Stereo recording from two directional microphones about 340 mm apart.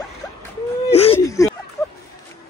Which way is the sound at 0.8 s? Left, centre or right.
Centre.